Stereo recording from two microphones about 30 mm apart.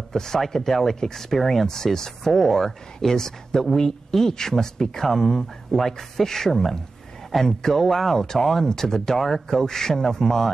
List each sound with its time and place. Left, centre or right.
0.1 s speech: centre